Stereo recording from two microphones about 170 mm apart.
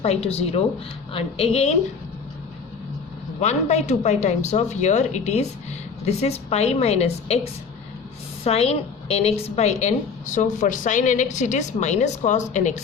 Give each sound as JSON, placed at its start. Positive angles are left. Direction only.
{"t": 0.0, "sound": "a woman's voice", "side_deg": 35}
{"t": 3.4, "sound": "a woman's voice", "side_deg": 40}
{"t": 8.4, "sound": "a woman's voice", "side_deg": 35}